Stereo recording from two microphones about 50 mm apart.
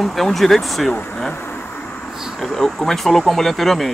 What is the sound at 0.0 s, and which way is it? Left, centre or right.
Speech, centre.